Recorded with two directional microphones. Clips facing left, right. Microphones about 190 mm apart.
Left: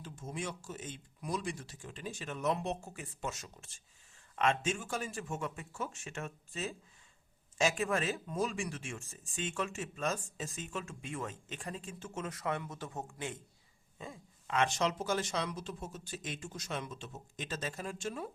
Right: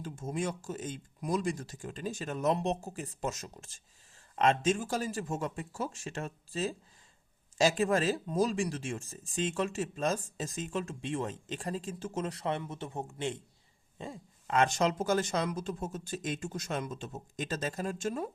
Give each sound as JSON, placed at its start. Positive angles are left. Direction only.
{"t": 0.0, "sound": "a man's voice", "side_deg": -45}